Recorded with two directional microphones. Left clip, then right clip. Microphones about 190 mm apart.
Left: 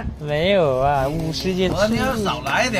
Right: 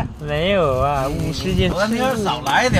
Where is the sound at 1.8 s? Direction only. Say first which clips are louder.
Right 2 dB; 30° right (ahead or behind).